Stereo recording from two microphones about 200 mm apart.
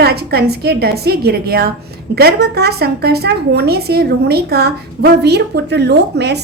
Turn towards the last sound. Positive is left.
turn(degrees=-55)  # may be behind; listen again after turning